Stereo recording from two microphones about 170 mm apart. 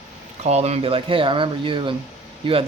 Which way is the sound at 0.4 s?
40° right (ahead or behind).